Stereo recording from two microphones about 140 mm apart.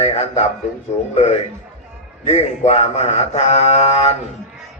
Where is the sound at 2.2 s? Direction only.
50° left (ahead or behind).